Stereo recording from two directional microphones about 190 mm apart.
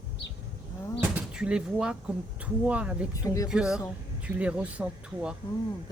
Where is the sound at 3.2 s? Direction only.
15° left (ahead or behind).